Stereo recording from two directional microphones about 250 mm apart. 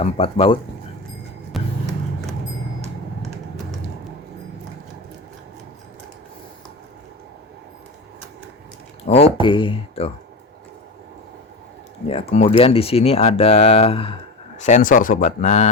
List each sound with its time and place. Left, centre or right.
0.0 s speech: left
1.5 s music: centre
9.0 s speech: left
12.0 s speech: left
14.6 s speech: left